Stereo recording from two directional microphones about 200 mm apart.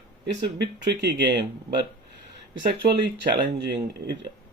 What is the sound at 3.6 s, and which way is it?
Speech, 55° right (ahead or behind).